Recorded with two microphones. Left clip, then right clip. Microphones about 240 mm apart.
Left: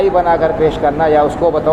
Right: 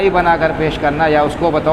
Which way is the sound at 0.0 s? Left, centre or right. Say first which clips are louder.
Left 1 dB; right.